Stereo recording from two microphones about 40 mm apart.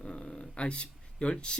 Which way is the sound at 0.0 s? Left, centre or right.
Left.